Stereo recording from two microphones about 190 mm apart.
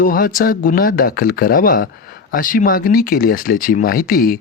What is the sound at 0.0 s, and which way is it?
Speech, 50° left (ahead or behind).